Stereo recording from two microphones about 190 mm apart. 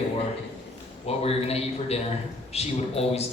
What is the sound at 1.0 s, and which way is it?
A man's voice, 30° left (ahead or behind).